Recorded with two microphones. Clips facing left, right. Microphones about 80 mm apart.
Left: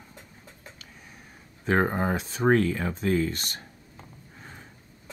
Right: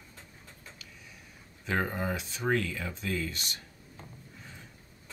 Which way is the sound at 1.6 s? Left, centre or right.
Left.